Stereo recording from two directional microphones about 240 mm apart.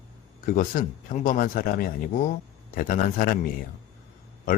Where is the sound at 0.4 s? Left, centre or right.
Left.